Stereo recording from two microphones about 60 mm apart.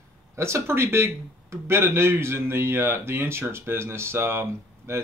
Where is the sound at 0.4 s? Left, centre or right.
Right.